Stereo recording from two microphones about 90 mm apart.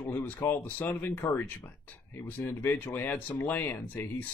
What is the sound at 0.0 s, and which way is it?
Speech, 20° left (ahead or behind).